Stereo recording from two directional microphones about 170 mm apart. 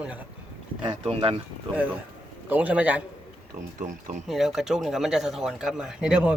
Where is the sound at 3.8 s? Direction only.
50° right (ahead or behind).